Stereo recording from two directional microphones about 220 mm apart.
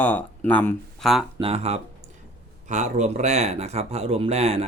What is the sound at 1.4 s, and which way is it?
Speech, 30° right (ahead or behind).